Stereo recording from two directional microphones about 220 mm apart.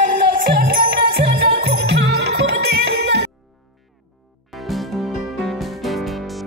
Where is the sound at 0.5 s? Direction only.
45° right (ahead or behind).